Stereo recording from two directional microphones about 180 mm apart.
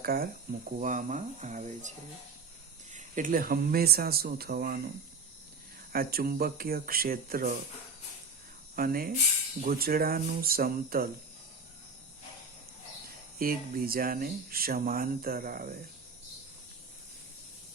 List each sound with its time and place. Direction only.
0.0 s speech: 55° right (ahead or behind)
2.9 s speech: 50° right (ahead or behind)
5.9 s speech: 55° right (ahead or behind)
8.7 s speech: 55° right (ahead or behind)
13.4 s speech: 55° right (ahead or behind)